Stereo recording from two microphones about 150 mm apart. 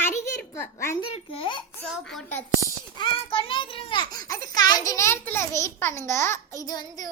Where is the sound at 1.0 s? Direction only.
40° left (ahead or behind).